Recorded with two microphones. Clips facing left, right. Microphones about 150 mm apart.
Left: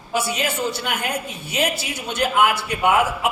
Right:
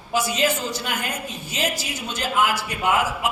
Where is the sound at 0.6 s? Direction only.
65° left (ahead or behind).